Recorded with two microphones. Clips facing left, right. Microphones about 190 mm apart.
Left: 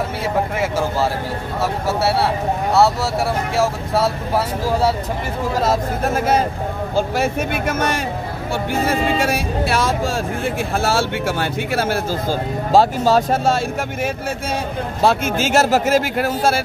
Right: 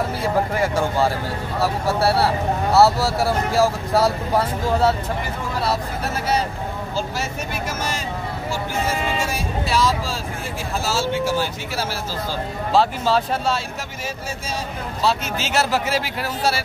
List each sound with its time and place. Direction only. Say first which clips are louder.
0.6 s speech: even; centre (ahead or behind)
5.6 s speech: left 4 dB; 45° left (ahead or behind)
9.2 s speech: left 5 dB; 60° left (ahead or behind)
15.0 s speech: left 5 dB; 50° left (ahead or behind)